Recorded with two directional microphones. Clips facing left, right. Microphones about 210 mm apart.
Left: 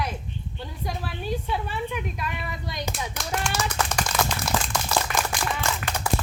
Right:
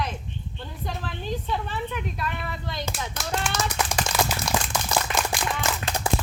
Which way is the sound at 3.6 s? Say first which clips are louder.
Even; 10° right (ahead or behind).